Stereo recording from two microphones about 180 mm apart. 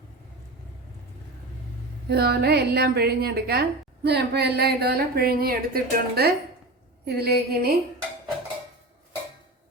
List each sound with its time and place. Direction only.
2.0 s a woman's voice: 60° right (ahead or behind)